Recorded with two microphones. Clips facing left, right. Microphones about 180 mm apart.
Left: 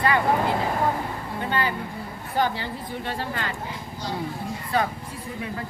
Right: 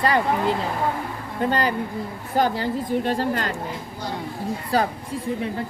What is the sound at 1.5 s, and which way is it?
A woman's voice, 40° right (ahead or behind).